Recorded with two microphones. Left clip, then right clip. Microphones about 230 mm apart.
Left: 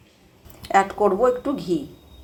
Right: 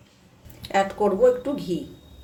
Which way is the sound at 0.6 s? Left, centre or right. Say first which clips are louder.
Left 4 dB; centre.